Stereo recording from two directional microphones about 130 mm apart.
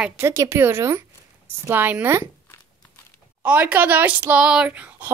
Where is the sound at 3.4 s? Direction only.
10° right (ahead or behind).